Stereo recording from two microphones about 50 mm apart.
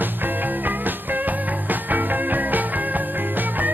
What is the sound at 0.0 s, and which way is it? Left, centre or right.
Music, right.